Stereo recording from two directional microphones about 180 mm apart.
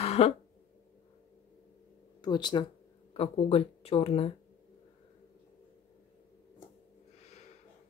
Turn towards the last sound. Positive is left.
turn(degrees=40)  # may be behind; listen again after turning